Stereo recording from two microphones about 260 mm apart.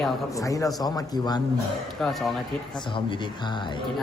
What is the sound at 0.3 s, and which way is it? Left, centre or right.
A man's voice, centre.